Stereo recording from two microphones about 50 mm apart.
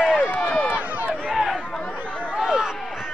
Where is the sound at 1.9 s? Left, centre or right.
Left.